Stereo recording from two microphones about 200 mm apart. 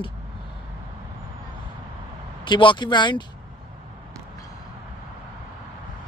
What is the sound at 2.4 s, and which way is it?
Speech, 25° left (ahead or behind).